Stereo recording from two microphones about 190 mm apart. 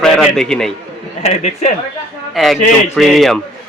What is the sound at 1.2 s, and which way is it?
Speech, 35° left (ahead or behind).